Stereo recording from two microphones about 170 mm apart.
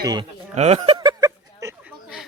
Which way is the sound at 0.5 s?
40° right (ahead or behind).